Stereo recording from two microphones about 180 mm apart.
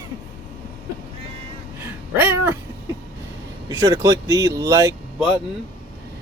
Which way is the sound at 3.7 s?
20° right (ahead or behind).